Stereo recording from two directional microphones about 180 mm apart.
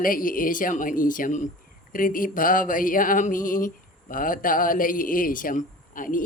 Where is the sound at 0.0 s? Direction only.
50° left (ahead or behind).